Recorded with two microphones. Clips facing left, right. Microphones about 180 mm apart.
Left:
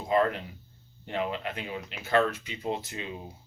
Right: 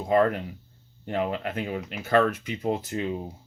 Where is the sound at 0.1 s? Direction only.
50° right (ahead or behind).